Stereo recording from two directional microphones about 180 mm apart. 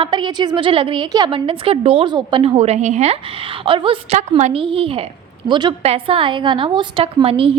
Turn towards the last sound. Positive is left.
turn(degrees=-30)  # may be behind; listen again after turning